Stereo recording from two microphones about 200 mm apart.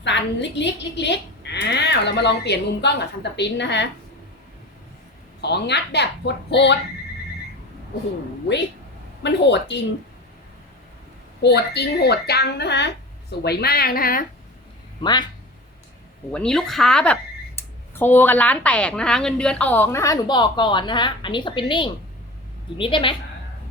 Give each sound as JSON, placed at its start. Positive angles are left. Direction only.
{"t": 0.0, "sound": "a woman's voice", "side_deg": 60}
{"t": 5.4, "sound": "a woman's voice", "side_deg": 55}
{"t": 9.2, "sound": "a woman's voice", "side_deg": 60}
{"t": 11.4, "sound": "a woman's voice", "side_deg": 55}
{"t": 15.0, "sound": "a woman's voice", "side_deg": 20}
{"t": 16.3, "sound": "a woman's voice", "side_deg": 5}